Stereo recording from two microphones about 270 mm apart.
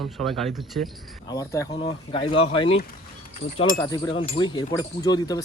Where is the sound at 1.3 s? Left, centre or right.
Centre.